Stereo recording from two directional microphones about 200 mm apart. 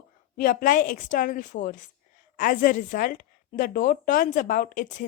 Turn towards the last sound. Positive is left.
turn(degrees=40)  # may be behind; listen again after turning